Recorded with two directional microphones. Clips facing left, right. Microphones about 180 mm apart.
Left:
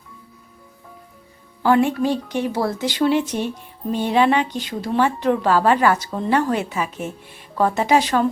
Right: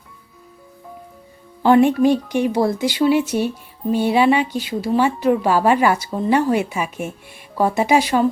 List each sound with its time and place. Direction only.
1.6 s a woman's voice: 20° right (ahead or behind)